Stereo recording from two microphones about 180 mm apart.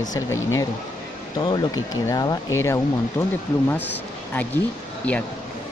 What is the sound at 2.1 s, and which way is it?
Speech, 20° left (ahead or behind).